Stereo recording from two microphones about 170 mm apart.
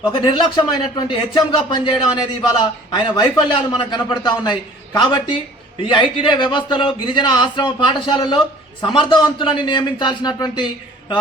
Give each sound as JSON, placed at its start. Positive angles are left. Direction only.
{"t": 0.3, "sound": "speech", "side_deg": 25}